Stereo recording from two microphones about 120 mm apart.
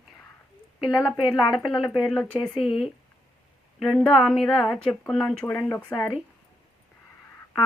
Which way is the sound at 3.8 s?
5° left (ahead or behind).